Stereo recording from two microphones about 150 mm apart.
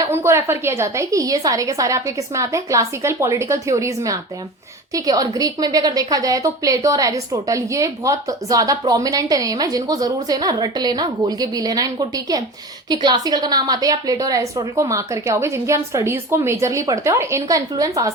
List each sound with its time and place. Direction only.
0.0 s a woman's voice: 15° right (ahead or behind)